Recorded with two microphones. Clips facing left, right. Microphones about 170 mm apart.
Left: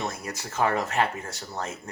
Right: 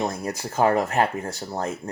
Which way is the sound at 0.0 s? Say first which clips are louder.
Right 6 dB; 35° right (ahead or behind).